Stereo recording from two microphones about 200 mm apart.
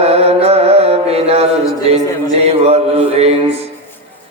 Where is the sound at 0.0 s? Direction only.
30° right (ahead or behind).